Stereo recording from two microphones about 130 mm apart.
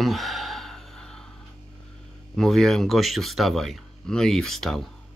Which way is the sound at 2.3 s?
Centre (ahead or behind).